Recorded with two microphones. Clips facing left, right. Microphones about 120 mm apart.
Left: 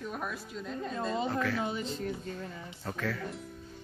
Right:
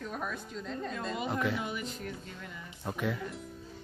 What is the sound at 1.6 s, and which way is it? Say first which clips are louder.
Speech: left 4 dB; 30° left (ahead or behind).